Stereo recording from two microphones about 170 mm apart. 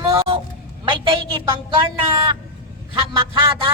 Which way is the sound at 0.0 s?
20° right (ahead or behind).